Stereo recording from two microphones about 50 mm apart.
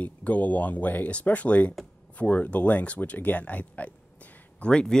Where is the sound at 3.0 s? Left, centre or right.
Left.